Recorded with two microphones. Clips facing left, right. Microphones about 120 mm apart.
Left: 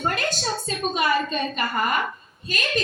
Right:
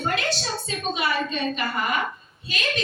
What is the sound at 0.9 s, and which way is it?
A woman's voice, 45° left (ahead or behind).